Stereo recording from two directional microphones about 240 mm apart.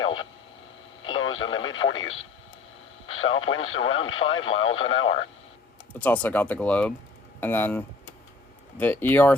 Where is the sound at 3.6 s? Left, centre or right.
Left.